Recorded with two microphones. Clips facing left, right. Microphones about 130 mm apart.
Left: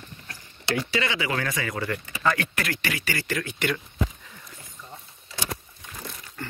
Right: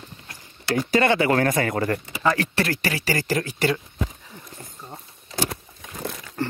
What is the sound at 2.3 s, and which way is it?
Speech, 35° right (ahead or behind).